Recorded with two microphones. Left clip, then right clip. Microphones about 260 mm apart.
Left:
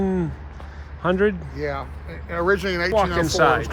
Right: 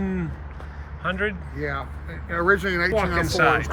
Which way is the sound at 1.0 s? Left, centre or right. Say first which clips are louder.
Left 5 dB; centre.